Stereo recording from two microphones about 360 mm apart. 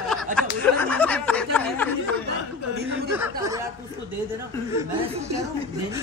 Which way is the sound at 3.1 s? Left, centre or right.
Centre.